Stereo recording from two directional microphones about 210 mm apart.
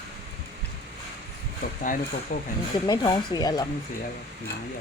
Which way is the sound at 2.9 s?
20° left (ahead or behind).